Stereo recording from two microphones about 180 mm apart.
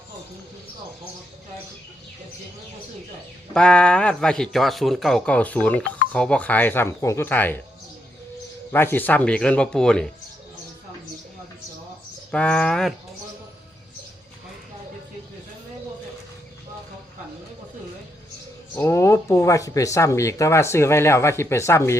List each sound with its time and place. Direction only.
3.5 s speech: 5° left (ahead or behind)
8.7 s speech: 10° left (ahead or behind)
12.3 s speech: 5° left (ahead or behind)
18.8 s speech: 15° left (ahead or behind)